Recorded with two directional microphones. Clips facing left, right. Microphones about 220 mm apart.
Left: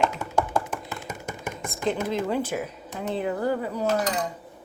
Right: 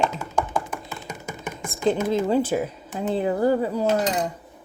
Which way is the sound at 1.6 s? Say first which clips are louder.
Right 5 dB; 30° right (ahead or behind).